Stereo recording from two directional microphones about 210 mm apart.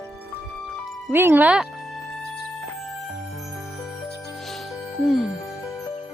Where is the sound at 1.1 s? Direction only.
10° right (ahead or behind).